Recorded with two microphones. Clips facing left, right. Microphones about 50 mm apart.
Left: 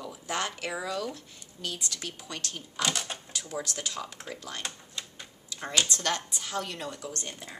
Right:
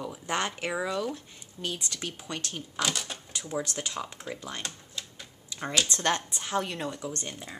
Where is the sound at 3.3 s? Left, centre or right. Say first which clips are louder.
Right 2 dB; right.